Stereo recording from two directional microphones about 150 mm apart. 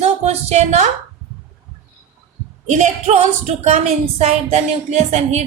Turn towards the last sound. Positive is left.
turn(degrees=-50)  # may be behind; listen again after turning